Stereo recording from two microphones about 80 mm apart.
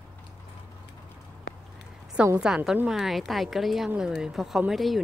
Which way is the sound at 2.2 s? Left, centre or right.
Centre.